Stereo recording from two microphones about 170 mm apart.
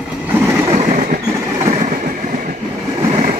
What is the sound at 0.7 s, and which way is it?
Train, 45° right (ahead or behind).